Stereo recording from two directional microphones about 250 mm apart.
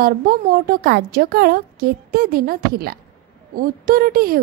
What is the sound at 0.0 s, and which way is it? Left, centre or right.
A woman's voice, right.